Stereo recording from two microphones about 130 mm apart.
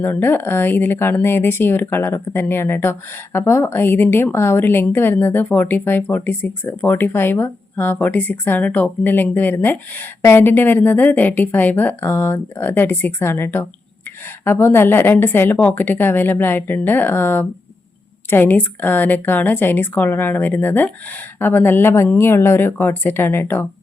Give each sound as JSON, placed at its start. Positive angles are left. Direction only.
{"t": 0.0, "sound": "a woman's voice", "side_deg": 15}